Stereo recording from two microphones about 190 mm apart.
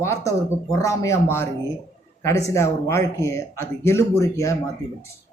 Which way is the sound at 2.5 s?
15° left (ahead or behind).